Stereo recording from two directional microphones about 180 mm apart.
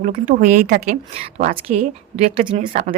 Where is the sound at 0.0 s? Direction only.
45° right (ahead or behind).